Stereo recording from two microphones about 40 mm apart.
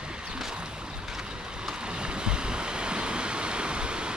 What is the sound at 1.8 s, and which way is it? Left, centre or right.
Waves, right.